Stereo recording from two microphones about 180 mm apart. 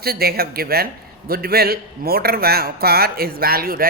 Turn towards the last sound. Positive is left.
turn(degrees=-55)  # may be behind; listen again after turning